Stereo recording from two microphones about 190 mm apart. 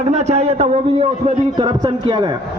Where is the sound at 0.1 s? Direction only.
35° right (ahead or behind).